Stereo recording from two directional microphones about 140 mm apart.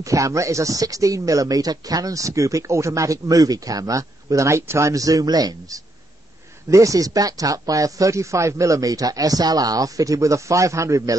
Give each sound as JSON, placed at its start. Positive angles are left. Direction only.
{"t": 0.0, "sound": "speech", "side_deg": -25}